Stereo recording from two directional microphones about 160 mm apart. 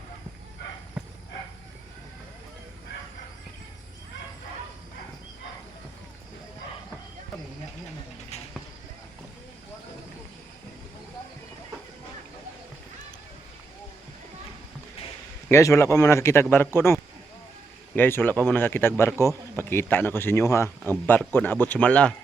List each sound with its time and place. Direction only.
15.4 s speech: 15° left (ahead or behind)